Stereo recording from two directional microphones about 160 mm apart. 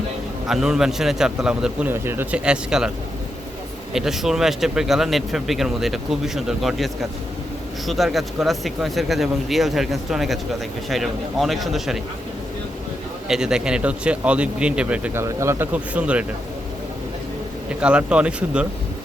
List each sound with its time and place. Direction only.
0.4 s speech: 5° right (ahead or behind)
3.9 s speech: centre (ahead or behind)
13.2 s speech: 5° right (ahead or behind)
17.7 s speech: 5° right (ahead or behind)